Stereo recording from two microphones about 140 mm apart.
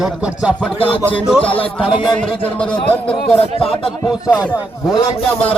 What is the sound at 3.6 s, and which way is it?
Speech, 40° left (ahead or behind).